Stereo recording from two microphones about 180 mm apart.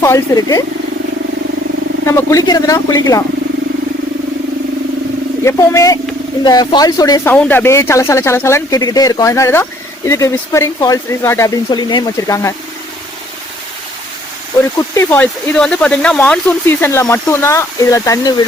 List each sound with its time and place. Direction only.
0.0 s speech: 20° left (ahead or behind)
2.0 s speech: 15° left (ahead or behind)
5.5 s speech: 15° left (ahead or behind)
7.3 s speech: 10° left (ahead or behind)
14.8 s speech: 15° left (ahead or behind)